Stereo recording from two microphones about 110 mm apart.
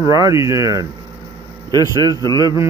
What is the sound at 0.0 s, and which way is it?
A man's voice, 30° right (ahead or behind).